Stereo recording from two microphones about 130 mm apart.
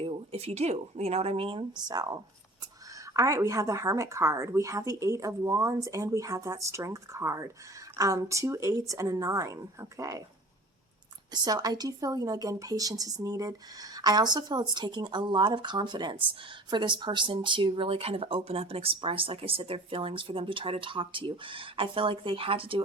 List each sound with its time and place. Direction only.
0.0 s speech: 50° right (ahead or behind); by 2.1 s 30° right (ahead or behind)
3.2 s a woman's voice: 25° right (ahead or behind)
11.4 s a woman's voice: 30° right (ahead or behind)